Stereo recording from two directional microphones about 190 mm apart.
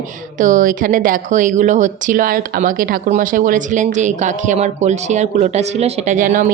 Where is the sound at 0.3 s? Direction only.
40° right (ahead or behind).